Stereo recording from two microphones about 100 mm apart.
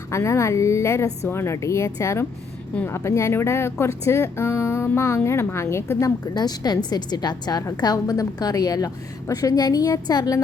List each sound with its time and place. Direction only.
0.1 s speech: 30° left (ahead or behind)
6.3 s a woman's voice: 40° left (ahead or behind)